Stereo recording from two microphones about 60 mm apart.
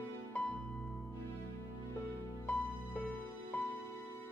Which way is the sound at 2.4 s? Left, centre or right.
Left.